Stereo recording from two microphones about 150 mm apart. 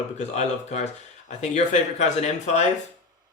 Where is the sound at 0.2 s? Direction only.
50° left (ahead or behind).